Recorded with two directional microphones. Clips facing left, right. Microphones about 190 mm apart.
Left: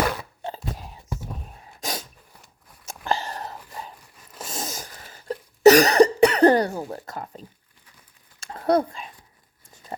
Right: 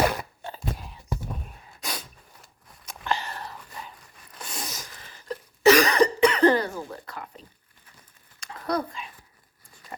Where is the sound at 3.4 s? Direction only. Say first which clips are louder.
Left 4 dB; 25° left (ahead or behind).